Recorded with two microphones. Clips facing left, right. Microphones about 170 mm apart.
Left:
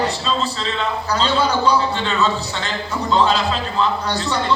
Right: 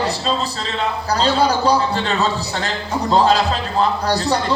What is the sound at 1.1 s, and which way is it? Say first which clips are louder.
Speech: right 3 dB; 35° right (ahead or behind).